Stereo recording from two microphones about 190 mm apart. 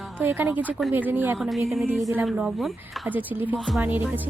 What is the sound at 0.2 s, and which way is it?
A woman's voice, 10° right (ahead or behind).